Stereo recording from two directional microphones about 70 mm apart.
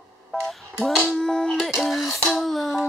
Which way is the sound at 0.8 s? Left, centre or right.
Centre.